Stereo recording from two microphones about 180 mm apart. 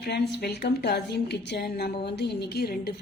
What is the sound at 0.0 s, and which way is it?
A woman's voice, 65° left (ahead or behind).